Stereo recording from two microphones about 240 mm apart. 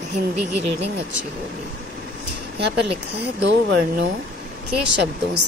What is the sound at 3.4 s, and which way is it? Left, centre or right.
Speech, right.